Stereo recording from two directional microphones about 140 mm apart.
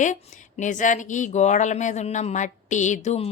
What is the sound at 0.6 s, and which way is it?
A woman's voice, 65° left (ahead or behind).